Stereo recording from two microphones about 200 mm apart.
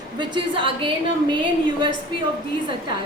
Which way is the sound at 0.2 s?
25° right (ahead or behind).